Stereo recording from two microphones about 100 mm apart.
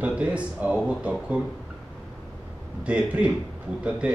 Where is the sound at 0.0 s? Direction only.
10° right (ahead or behind).